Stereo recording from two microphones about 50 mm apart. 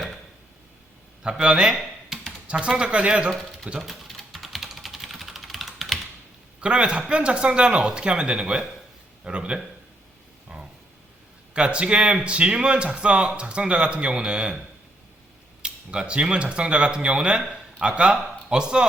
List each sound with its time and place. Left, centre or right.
1.2 s speech: centre
1.7 s computer keyboard: centre
2.5 s speech: centre
3.8 s typing: centre
6.6 s speech: centre
10.5 s a sound: centre
11.5 s speech: right
15.6 s speech: centre